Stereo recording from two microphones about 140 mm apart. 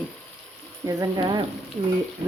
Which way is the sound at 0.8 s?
30° right (ahead or behind).